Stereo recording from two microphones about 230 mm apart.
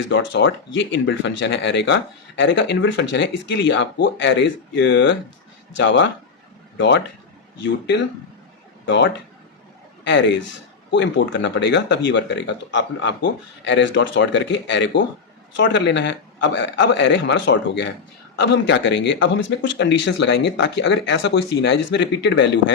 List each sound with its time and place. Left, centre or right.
0.1 s speech: left